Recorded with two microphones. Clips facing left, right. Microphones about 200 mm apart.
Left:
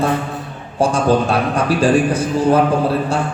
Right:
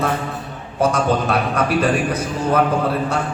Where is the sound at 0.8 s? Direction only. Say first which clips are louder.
Left 3 dB; 30° left (ahead or behind).